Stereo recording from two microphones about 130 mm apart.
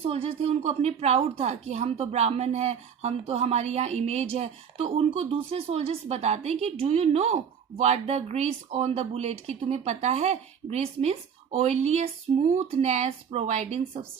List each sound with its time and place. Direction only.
0.0 s a woman's voice: 50° right (ahead or behind)